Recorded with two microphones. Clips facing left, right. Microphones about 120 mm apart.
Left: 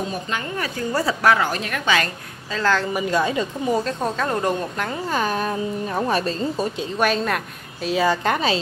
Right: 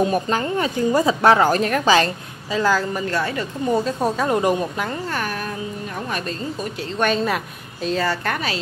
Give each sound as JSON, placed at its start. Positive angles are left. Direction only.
{"t": 0.6, "sound": "a woman's voice", "side_deg": -20}
{"t": 1.3, "sound": "a woman's voice", "side_deg": -40}
{"t": 2.5, "sound": "speech", "side_deg": -10}
{"t": 2.9, "sound": "a woman's voice", "side_deg": 15}
{"t": 3.7, "sound": "speech", "side_deg": -5}
{"t": 4.9, "sound": "a woman's voice", "side_deg": 15}
{"t": 7.0, "sound": "a woman's voice", "side_deg": 0}
{"t": 7.9, "sound": "a woman's voice", "side_deg": 15}